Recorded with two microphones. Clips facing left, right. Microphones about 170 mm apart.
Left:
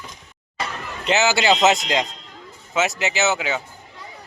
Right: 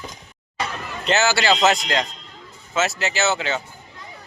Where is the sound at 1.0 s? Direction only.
15° left (ahead or behind).